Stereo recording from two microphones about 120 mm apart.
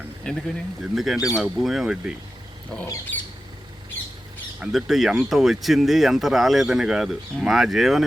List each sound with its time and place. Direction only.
0.3 s speech: 5° left (ahead or behind)
4.6 s speech: centre (ahead or behind)